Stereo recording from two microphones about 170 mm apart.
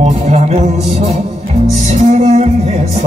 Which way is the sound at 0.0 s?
40° right (ahead or behind).